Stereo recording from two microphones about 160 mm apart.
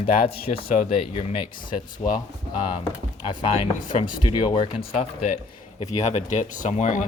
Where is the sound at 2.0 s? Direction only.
45° left (ahead or behind).